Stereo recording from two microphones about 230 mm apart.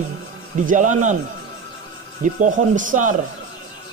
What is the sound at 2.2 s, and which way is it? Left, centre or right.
Speech, right.